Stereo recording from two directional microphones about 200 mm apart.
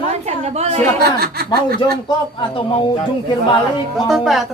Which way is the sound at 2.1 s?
25° left (ahead or behind).